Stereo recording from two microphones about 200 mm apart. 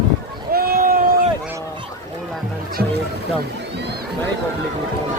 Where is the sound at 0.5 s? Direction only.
50° right (ahead or behind).